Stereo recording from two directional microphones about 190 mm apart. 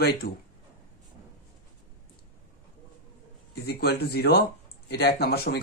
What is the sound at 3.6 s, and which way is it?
Speech, 55° left (ahead or behind).